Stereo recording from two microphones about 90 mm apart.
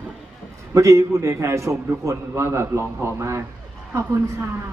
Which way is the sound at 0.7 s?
35° right (ahead or behind).